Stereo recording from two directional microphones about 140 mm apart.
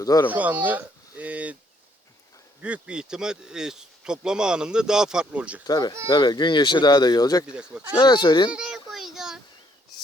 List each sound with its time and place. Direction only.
0.0 s speech: 25° left (ahead or behind)
0.3 s a sound: 10° right (ahead or behind)
2.6 s speech: 10° right (ahead or behind)
5.6 s speech: 30° left (ahead or behind)
7.4 s speech: 5° right (ahead or behind)
7.9 s speech: 30° left (ahead or behind)
8.4 s a sound: 5° right (ahead or behind)